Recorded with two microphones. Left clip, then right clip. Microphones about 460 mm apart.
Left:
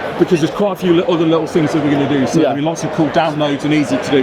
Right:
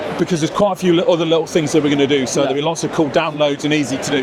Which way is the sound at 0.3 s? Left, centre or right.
Right.